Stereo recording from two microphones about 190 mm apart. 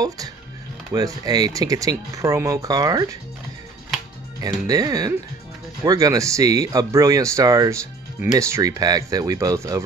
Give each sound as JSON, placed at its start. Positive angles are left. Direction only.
{"t": 0.9, "sound": "speech", "side_deg": -20}
{"t": 4.4, "sound": "speech", "side_deg": -20}